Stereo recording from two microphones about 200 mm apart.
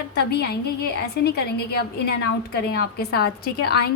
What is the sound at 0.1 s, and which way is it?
A woman's voice, 55° left (ahead or behind).